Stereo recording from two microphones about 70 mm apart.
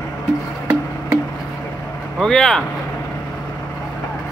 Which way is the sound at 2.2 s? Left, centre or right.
Centre.